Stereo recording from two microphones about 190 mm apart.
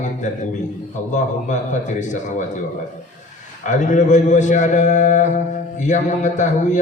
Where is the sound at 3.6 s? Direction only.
40° left (ahead or behind).